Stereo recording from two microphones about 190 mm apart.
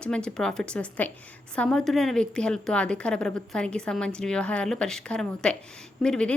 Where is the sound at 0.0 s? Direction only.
5° left (ahead or behind).